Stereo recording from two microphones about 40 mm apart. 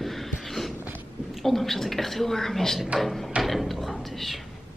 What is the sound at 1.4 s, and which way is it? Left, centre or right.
A woman's voice, centre.